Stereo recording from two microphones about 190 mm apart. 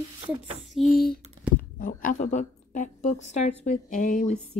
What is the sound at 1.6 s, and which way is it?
A woman's voice, 45° left (ahead or behind).